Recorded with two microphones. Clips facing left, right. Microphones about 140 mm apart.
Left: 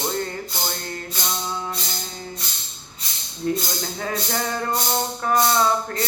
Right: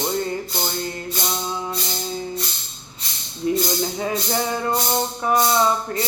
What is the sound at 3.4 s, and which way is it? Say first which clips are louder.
Music: right 4 dB; 15° right (ahead or behind).